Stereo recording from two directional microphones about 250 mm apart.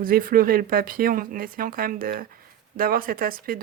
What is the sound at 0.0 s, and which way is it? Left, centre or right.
Speech, right.